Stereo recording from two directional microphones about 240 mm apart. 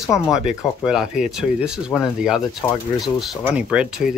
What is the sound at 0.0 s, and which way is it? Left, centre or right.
Speech, centre.